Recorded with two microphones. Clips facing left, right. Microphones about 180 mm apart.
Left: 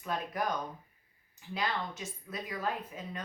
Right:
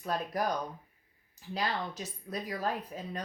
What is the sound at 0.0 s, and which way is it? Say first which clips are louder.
Speech: right 2 dB; 40° right (ahead or behind).